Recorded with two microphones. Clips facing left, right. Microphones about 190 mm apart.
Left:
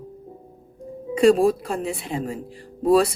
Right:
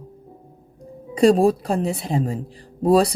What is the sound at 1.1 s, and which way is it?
A woman's voice, 35° right (ahead or behind).